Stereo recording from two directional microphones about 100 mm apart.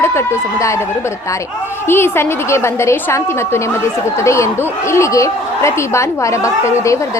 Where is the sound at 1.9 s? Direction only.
25° left (ahead or behind).